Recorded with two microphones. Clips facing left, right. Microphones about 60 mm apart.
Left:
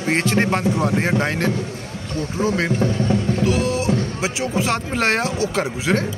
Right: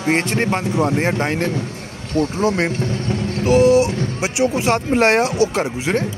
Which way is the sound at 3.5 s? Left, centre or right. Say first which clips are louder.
Right 13 dB; right.